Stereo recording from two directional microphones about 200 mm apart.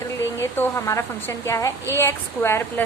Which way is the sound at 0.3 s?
10° left (ahead or behind).